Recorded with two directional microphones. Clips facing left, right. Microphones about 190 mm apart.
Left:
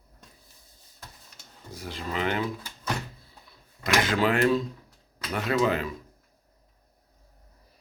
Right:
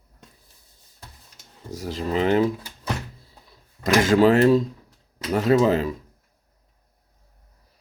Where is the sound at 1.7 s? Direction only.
40° right (ahead or behind).